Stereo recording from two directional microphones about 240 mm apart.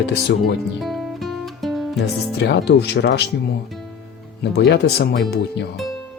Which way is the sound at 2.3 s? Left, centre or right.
Left.